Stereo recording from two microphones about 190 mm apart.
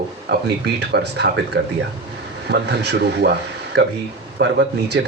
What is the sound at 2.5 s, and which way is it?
Speech, 65° right (ahead or behind).